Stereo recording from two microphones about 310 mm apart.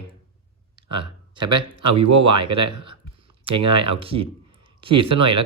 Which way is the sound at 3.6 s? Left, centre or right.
Centre.